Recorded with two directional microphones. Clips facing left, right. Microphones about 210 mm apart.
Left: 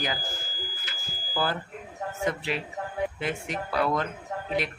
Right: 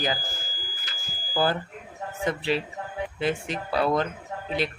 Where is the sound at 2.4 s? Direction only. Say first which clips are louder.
Right 4 dB; 30° right (ahead or behind).